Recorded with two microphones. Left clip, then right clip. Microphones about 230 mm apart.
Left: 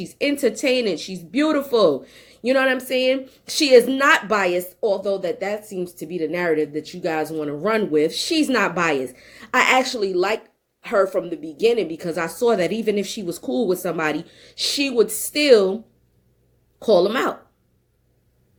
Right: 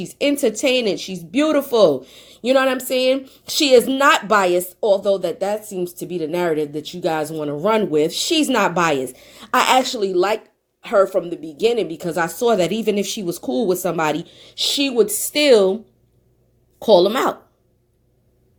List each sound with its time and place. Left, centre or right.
0.0 s speech: right
16.8 s speech: right